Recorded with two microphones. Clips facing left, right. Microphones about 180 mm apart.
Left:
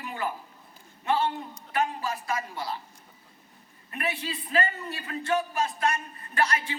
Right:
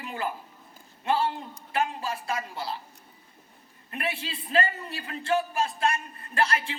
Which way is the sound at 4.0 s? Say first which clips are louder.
Left 1 dB; 30° right (ahead or behind).